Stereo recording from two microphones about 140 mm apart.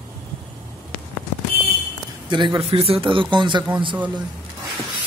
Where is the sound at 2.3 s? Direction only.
35° right (ahead or behind).